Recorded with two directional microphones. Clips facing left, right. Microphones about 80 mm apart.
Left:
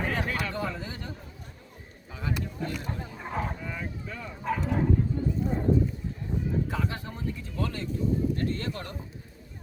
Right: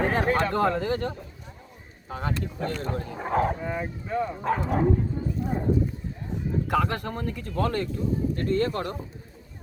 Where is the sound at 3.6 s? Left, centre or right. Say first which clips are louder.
Right 6 dB; right.